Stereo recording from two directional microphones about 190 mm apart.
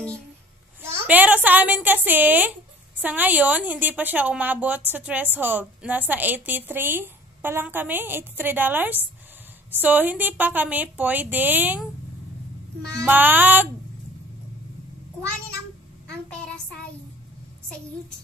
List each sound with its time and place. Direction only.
0.9 s a woman's voice: 10° right (ahead or behind)
13.0 s a woman's voice: 10° right (ahead or behind)
16.1 s a sound: 5° left (ahead or behind)